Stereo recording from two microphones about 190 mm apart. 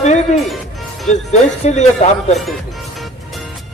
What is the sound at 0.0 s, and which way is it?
Music, 35° left (ahead or behind).